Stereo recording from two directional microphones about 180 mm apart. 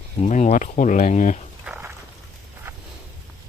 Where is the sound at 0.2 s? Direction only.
40° left (ahead or behind).